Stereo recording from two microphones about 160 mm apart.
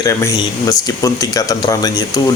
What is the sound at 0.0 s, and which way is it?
Speech, 20° left (ahead or behind).